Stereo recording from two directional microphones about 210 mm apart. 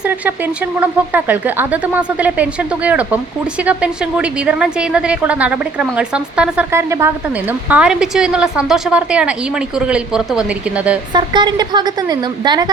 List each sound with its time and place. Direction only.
0.0 s a woman's voice: 10° right (ahead or behind)
11.1 s a woman's voice: 20° right (ahead or behind)